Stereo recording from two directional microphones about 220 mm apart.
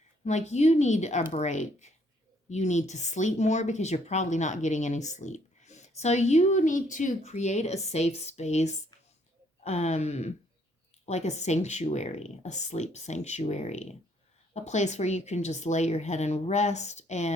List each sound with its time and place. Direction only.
0.3 s speech: 30° left (ahead or behind)